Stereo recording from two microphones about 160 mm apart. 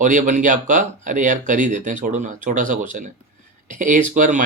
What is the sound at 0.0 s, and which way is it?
Speech, 50° right (ahead or behind).